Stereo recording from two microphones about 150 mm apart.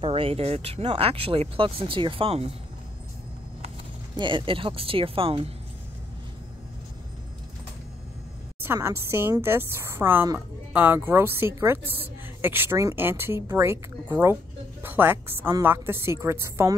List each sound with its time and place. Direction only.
0.0 s speech: 40° right (ahead or behind)
4.2 s speech: 35° right (ahead or behind)
8.6 s a woman's voice: 15° right (ahead or behind)